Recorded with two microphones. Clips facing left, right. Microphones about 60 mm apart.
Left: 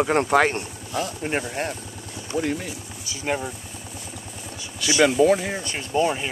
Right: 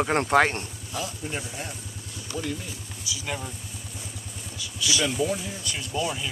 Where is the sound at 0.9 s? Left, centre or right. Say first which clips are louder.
Left 7 dB; left.